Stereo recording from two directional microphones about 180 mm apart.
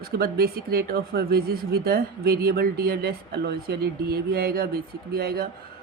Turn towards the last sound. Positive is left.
turn(degrees=-60)  # may be behind; listen again after turning